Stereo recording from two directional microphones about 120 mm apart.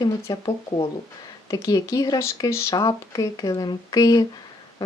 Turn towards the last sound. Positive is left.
turn(degrees=30)  # may be behind; listen again after turning